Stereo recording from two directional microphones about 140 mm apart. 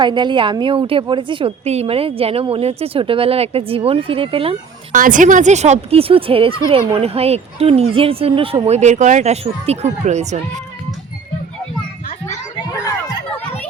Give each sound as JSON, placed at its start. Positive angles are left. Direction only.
{"t": 0.0, "sound": "a woman's voice", "side_deg": -35}
{"t": 4.9, "sound": "speech", "side_deg": -70}